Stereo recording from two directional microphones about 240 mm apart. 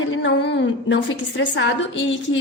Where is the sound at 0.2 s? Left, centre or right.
Left.